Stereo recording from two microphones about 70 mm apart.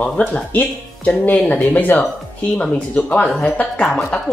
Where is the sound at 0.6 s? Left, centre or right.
Left.